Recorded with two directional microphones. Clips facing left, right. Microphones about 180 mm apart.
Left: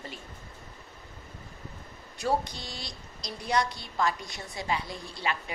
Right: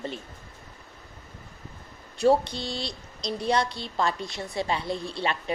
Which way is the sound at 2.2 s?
30° right (ahead or behind).